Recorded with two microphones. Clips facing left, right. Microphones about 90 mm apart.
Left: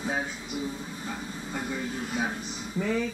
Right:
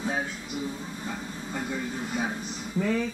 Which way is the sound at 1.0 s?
Centre (ahead or behind).